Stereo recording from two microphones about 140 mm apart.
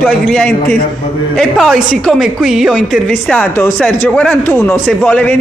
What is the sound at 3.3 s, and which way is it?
A man's voice, 15° left (ahead or behind).